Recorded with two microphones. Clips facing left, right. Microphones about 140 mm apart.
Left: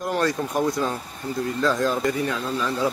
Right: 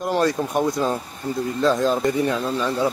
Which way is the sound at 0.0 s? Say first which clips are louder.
Right 3 dB; 25° right (ahead or behind).